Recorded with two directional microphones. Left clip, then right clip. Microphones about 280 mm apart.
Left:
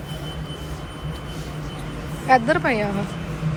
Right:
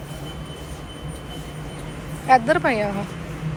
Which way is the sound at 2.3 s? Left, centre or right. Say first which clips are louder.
Right 1 dB; centre.